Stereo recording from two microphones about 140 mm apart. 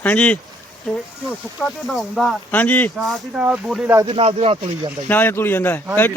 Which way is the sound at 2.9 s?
Centre (ahead or behind).